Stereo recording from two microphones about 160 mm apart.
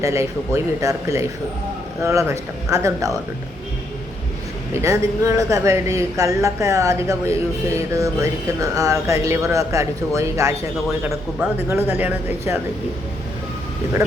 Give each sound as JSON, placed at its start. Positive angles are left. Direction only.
{"t": 0.0, "sound": "a woman's voice", "side_deg": -20}
{"t": 4.7, "sound": "a woman's voice", "side_deg": -20}